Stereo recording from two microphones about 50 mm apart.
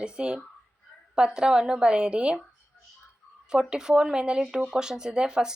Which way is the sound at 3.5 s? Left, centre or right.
Centre.